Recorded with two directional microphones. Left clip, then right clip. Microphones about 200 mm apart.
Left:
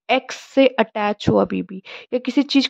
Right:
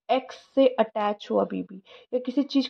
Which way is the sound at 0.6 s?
30° left (ahead or behind).